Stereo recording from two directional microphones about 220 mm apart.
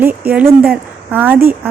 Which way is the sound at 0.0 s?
5° right (ahead or behind).